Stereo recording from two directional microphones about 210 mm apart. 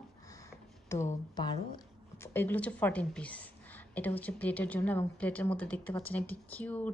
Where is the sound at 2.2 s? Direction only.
10° left (ahead or behind).